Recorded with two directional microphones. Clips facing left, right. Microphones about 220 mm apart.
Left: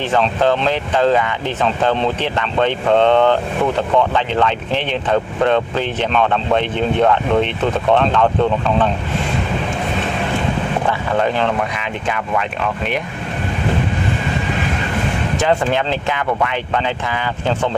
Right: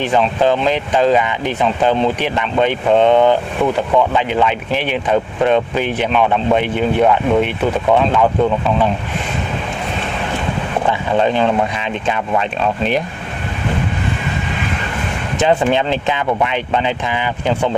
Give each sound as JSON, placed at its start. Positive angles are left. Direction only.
{"t": 0.0, "sound": "speech", "side_deg": -15}
{"t": 11.2, "sound": "speech", "side_deg": -20}
{"t": 15.4, "sound": "speech", "side_deg": -20}